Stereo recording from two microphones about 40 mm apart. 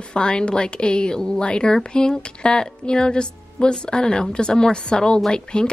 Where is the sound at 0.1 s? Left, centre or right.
Left.